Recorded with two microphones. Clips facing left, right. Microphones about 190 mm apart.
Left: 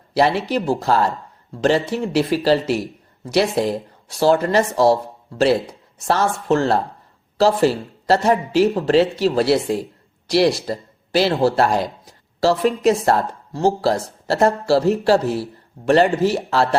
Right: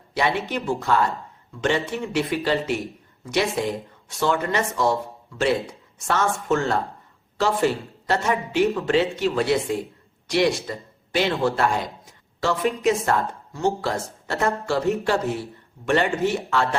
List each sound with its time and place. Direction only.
0.1 s a man's voice: 35° left (ahead or behind)